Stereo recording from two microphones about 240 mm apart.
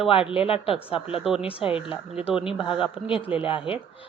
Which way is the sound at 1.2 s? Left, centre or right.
Centre.